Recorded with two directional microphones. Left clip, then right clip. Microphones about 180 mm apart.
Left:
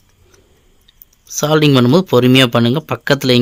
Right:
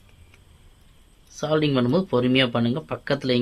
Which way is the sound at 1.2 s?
70° left (ahead or behind).